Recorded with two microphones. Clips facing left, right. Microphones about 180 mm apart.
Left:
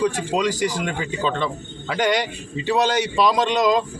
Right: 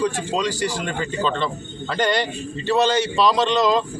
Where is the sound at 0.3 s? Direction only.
15° left (ahead or behind).